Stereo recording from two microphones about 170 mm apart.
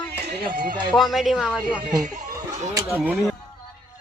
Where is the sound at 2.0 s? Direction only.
45° right (ahead or behind).